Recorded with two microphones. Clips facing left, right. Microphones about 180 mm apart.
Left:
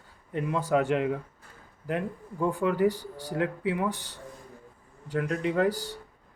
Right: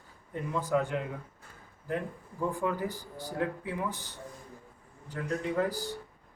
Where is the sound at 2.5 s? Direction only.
75° left (ahead or behind).